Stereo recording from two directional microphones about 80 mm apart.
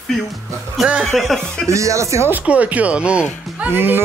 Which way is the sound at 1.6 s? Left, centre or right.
Right.